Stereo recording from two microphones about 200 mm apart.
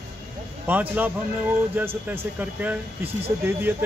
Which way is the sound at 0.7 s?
10° right (ahead or behind).